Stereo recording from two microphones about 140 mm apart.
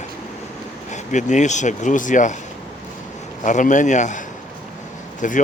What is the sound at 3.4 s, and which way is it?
Speech, 65° left (ahead or behind).